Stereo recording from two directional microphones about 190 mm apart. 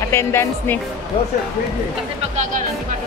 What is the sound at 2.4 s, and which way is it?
Speech, 45° right (ahead or behind).